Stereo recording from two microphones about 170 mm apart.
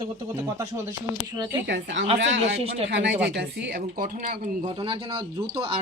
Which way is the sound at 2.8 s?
90° right.